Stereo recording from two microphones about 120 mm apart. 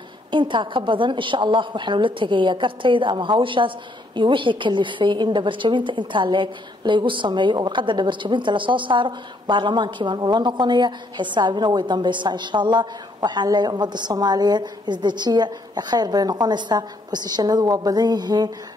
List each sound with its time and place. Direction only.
0.3 s a woman's voice: 40° right (ahead or behind)